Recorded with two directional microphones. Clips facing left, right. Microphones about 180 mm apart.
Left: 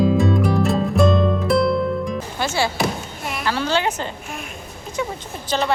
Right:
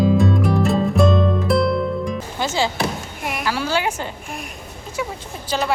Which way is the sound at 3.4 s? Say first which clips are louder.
Left 1 dB; 10° right (ahead or behind).